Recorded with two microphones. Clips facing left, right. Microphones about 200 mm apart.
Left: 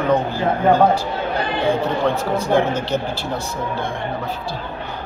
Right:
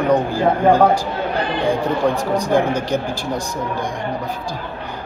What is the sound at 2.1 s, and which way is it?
Speech, 15° right (ahead or behind).